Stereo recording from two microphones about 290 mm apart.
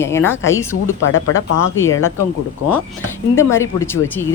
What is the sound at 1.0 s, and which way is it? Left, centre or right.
Speech, left.